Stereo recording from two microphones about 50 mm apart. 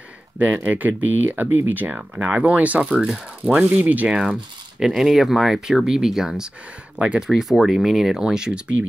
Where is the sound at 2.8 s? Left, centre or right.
Centre.